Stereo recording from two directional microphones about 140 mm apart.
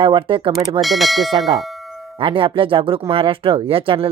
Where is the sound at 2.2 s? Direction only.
40° right (ahead or behind).